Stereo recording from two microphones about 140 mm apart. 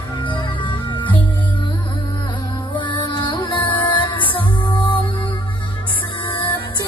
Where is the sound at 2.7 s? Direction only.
35° left (ahead or behind).